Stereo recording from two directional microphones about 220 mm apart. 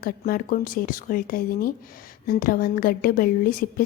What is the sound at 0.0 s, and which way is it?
A woman's voice, 40° left (ahead or behind).